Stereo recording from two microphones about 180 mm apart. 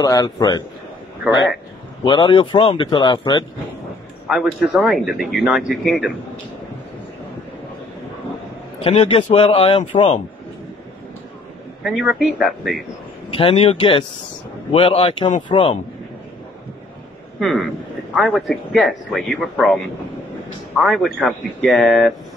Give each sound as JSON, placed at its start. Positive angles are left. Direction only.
{"t": 0.0, "sound": "speech", "side_deg": 20}
{"t": 2.0, "sound": "speech", "side_deg": 25}
{"t": 4.3, "sound": "speech", "side_deg": 0}
{"t": 8.7, "sound": "speech", "side_deg": 35}
{"t": 11.8, "sound": "speech", "side_deg": 0}
{"t": 13.3, "sound": "speech", "side_deg": 30}
{"t": 17.4, "sound": "speech", "side_deg": 0}